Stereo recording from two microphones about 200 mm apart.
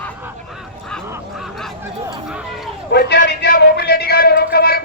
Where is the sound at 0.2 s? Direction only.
5° right (ahead or behind).